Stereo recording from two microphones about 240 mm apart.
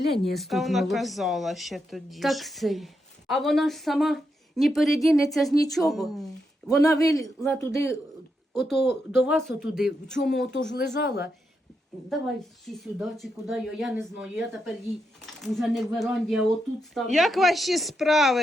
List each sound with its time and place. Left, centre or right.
0.3 s speech: centre
6.7 s a man's voice: centre
8.5 s speech: centre
8.8 s speech: left
9.2 s speech: centre
10.2 s speech: left
12.6 s speech: centre